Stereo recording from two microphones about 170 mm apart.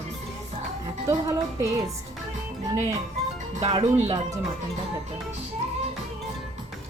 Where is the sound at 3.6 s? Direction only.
35° right (ahead or behind).